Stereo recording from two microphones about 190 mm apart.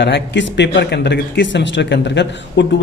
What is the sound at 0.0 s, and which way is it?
A man's voice, 70° left (ahead or behind).